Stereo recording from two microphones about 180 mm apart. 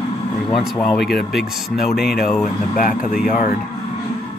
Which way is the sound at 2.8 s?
50° left (ahead or behind).